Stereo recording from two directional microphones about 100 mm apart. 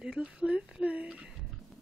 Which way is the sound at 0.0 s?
10° right (ahead or behind).